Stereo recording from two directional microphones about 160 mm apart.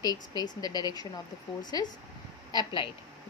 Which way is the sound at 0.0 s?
25° left (ahead or behind).